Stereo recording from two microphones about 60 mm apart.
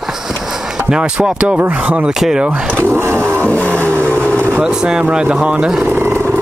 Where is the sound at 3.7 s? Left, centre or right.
Right.